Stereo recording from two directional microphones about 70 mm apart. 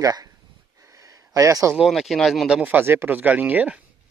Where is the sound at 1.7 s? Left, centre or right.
Centre.